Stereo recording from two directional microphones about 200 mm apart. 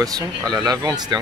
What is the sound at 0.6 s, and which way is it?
Speech, 20° right (ahead or behind).